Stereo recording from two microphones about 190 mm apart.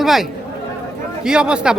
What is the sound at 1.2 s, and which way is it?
Speech, 5° right (ahead or behind).